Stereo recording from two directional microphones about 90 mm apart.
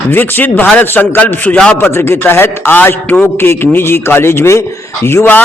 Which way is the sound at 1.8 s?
30° left (ahead or behind).